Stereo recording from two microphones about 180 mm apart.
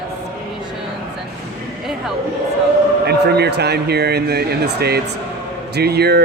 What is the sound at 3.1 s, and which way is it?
Mantra, 65° right (ahead or behind).